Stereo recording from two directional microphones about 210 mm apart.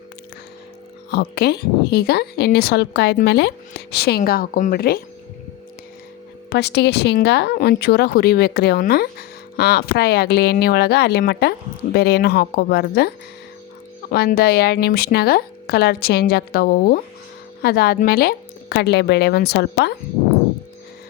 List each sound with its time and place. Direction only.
1.1 s a woman's voice: 50° left (ahead or behind)
6.5 s a woman's voice: 55° left (ahead or behind)
14.1 s a woman's voice: 50° left (ahead or behind)